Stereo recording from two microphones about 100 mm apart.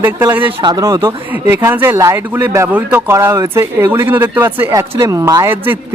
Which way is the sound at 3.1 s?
30° right (ahead or behind).